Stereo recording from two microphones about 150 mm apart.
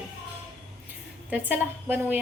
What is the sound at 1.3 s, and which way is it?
Speech, 10° right (ahead or behind).